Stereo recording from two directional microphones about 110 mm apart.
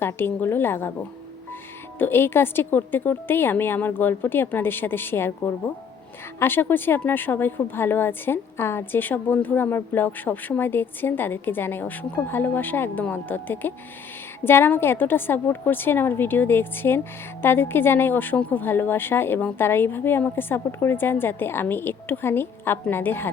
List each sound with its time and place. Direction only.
0.0 s a woman's voice: 20° left (ahead or behind)